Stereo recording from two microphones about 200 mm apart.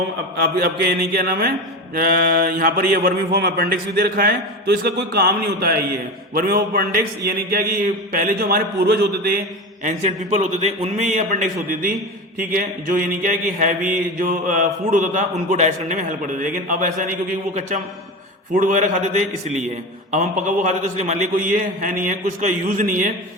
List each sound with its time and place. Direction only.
0.3 s a man's voice: 50° right (ahead or behind)
9.8 s mantra: 35° right (ahead or behind)
18.5 s mantra: 40° right (ahead or behind)